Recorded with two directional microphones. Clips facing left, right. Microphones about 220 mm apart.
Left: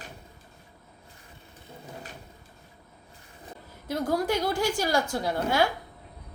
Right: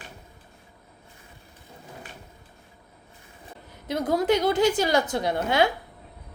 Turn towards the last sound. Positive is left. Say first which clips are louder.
# right 2 dB
turn(degrees=-20)  # may be behind; listen again after turning